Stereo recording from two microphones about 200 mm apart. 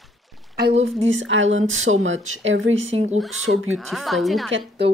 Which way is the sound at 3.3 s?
85° right.